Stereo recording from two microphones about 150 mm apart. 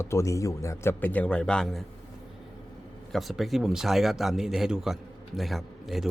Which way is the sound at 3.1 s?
Centre (ahead or behind).